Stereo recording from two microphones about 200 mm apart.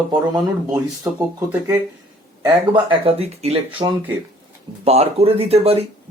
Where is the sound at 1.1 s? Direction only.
15° right (ahead or behind).